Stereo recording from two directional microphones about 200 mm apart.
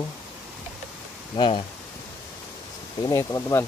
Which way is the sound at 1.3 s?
25° left (ahead or behind).